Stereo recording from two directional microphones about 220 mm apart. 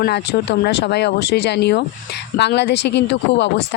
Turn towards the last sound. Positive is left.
turn(degrees=50)  # may be behind; listen again after turning